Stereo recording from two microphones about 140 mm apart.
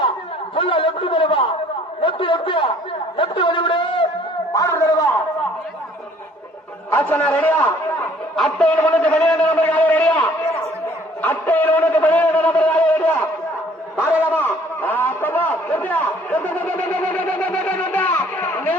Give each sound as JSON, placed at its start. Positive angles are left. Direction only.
{"t": 0.5, "sound": "a man's voice", "side_deg": 40}
{"t": 4.5, "sound": "speech", "side_deg": 20}
{"t": 6.9, "sound": "a man's voice", "side_deg": 10}
{"t": 14.3, "sound": "a sound", "side_deg": 15}